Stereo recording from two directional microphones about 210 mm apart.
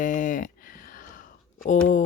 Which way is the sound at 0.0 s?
40° left (ahead or behind).